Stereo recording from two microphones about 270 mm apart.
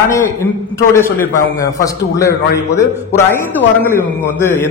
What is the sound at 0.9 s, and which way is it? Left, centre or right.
A man's voice, centre.